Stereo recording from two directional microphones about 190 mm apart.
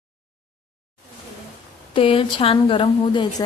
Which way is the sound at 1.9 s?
30° left (ahead or behind).